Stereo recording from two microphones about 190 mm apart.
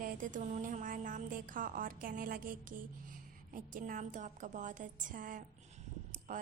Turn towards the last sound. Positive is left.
turn(degrees=-45)  # may be behind; listen again after turning